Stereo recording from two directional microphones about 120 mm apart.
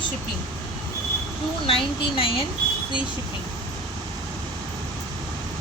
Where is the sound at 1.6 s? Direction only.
50° left (ahead or behind).